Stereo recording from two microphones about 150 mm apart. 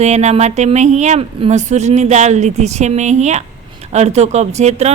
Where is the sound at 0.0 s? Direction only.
50° right (ahead or behind).